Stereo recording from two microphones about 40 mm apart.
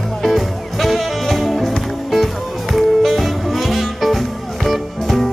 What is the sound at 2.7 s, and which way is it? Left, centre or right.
Music, centre.